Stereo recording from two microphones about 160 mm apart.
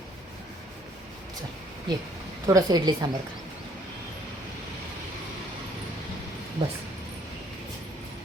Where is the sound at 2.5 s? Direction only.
25° right (ahead or behind).